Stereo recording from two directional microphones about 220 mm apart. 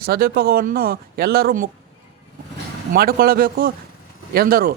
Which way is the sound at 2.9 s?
40° right (ahead or behind).